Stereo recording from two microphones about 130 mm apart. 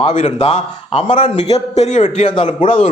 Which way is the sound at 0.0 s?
45° left (ahead or behind).